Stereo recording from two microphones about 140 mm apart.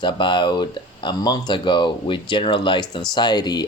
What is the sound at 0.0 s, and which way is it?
Speech, 35° left (ahead or behind).